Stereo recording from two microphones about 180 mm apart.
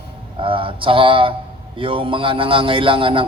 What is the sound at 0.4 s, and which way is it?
A man's voice, 30° right (ahead or behind).